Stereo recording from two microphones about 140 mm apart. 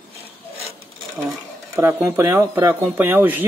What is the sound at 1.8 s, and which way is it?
Speech, 20° right (ahead or behind).